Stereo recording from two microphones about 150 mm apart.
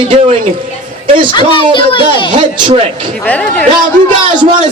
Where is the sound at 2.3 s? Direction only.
35° right (ahead or behind).